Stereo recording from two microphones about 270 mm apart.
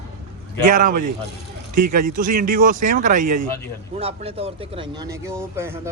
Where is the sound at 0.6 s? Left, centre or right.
Right.